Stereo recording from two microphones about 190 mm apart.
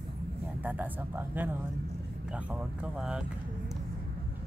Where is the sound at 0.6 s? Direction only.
10° right (ahead or behind).